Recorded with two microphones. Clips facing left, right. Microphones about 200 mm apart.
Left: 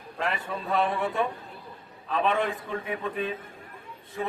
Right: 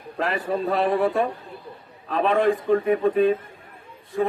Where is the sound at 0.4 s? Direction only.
35° right (ahead or behind).